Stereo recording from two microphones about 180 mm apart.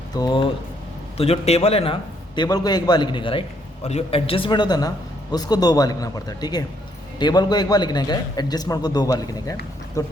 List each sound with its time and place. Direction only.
0.1 s a man's voice: 20° left (ahead or behind)